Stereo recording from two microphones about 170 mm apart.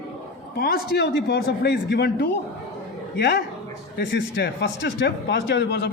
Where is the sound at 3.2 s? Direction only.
90° left.